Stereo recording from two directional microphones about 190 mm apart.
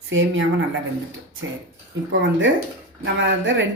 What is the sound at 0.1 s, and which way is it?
Speech, 90° right.